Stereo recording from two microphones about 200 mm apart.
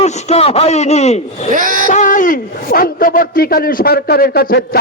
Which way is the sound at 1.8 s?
40° left (ahead or behind).